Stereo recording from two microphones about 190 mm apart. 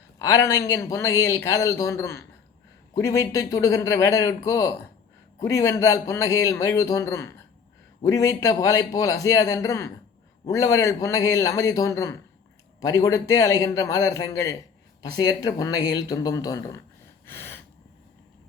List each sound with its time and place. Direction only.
0.2 s speech: 15° left (ahead or behind)
17.2 s gasp: 10° left (ahead or behind)